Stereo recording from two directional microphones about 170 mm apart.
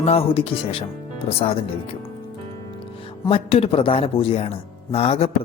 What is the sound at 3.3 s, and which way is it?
Speech, 35° left (ahead or behind).